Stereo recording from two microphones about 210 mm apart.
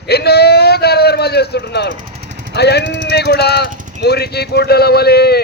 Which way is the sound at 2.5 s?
50° left (ahead or behind).